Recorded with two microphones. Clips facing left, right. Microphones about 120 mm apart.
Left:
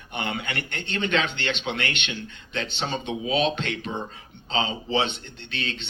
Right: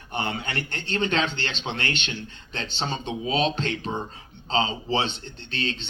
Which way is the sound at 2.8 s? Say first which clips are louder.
Right 1 dB; 35° right (ahead or behind).